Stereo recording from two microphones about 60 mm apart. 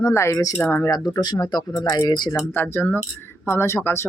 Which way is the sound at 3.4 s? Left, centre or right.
Left.